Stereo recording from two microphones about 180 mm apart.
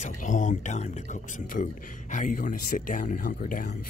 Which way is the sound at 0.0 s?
45° left (ahead or behind).